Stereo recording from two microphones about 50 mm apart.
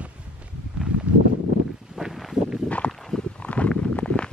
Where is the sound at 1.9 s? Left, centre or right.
Centre.